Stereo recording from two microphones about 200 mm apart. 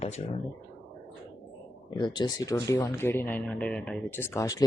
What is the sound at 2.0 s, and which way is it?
Speech, 20° left (ahead or behind).